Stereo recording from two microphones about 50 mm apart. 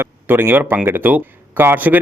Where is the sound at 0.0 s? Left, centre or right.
Right.